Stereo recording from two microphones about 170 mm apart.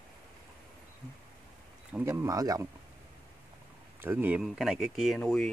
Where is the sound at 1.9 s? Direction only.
15° right (ahead or behind).